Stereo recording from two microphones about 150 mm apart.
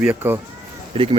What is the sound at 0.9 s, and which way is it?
Speech, 40° right (ahead or behind).